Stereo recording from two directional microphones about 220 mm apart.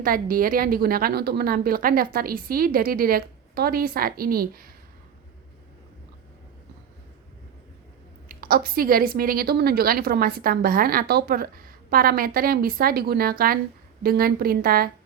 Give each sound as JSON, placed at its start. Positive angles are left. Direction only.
{"t": 0.0, "sound": "a woman's voice", "side_deg": -40}
{"t": 8.3, "sound": "a woman's voice", "side_deg": -45}